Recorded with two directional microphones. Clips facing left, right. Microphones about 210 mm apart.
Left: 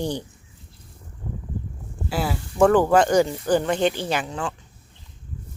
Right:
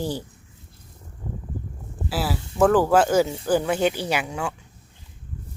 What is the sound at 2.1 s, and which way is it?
Speech, 5° right (ahead or behind).